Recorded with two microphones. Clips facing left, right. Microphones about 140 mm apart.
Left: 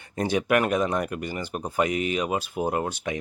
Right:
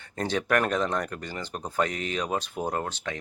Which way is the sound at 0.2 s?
10° left (ahead or behind).